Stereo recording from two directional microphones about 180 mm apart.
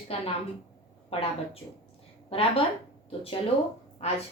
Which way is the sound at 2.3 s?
30° left (ahead or behind).